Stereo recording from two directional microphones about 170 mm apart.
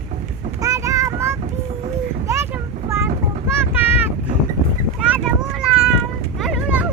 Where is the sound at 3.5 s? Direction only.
15° right (ahead or behind).